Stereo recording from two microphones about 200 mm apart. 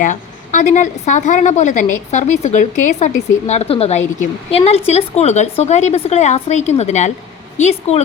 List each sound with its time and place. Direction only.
0.0 s a woman's voice: 40° left (ahead or behind)